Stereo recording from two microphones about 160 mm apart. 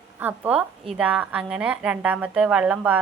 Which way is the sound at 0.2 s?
10° right (ahead or behind).